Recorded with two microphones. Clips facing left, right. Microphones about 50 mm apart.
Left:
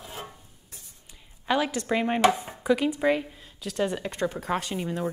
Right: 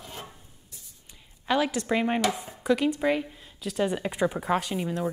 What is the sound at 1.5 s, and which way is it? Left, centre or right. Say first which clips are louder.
A woman's voice: even; centre.